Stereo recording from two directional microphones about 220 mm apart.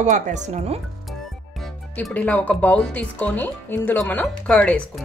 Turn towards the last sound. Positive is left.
turn(degrees=5)  # may be behind; listen again after turning